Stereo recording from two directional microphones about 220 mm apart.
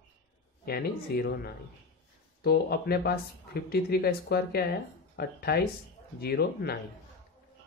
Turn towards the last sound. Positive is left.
turn(degrees=45)  # may be behind; listen again after turning